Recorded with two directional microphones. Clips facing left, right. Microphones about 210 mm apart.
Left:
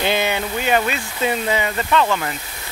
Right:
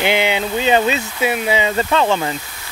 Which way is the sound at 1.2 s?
10° right (ahead or behind).